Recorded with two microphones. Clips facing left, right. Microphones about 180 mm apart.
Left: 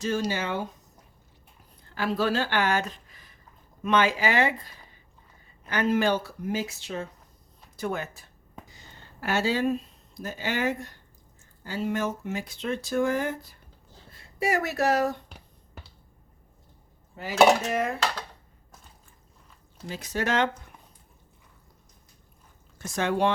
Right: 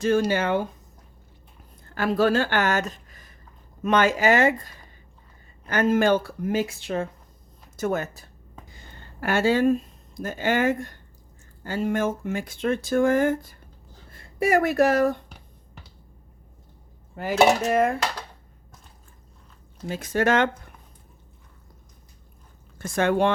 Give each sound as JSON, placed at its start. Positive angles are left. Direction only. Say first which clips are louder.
{"t": 0.0, "sound": "speech", "louder": "right 6 dB", "side_deg": -55}
{"t": 2.0, "sound": "speech", "louder": "right 5 dB", "side_deg": -50}
{"t": 7.8, "sound": "speech", "louder": "right 5 dB", "side_deg": -45}
{"t": 8.6, "sound": "speech", "louder": "right 3 dB", "side_deg": -55}
{"t": 17.2, "sound": "speech", "louder": "right 1 dB", "side_deg": -50}
{"t": 19.9, "sound": "speech", "louder": "right 6 dB", "side_deg": -50}
{"t": 22.8, "sound": "speech", "louder": "right 4 dB", "side_deg": -55}